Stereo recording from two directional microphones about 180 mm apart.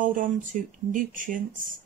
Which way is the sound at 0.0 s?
45° right (ahead or behind).